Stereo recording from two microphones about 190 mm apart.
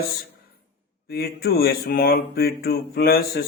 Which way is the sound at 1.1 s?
55° left (ahead or behind).